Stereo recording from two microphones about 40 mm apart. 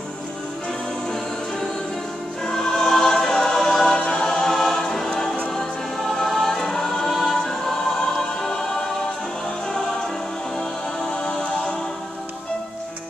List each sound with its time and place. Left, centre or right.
2.4 s choir: centre
3.8 s choir: left
11.2 s music: centre